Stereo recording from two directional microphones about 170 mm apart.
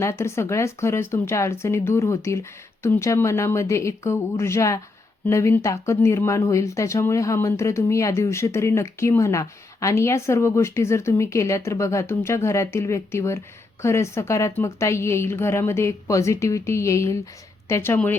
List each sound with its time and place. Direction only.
0.0 s speech: 15° left (ahead or behind)